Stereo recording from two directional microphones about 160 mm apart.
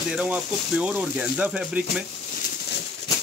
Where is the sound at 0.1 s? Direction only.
5° right (ahead or behind).